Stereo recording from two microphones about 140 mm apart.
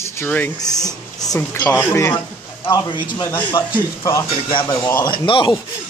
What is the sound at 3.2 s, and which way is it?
Speech, 15° left (ahead or behind).